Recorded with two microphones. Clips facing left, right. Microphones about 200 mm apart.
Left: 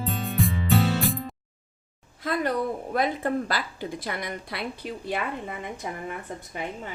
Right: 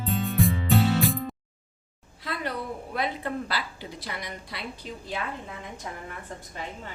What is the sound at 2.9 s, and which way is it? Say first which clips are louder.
A woman's voice: left 4 dB; 45° left (ahead or behind).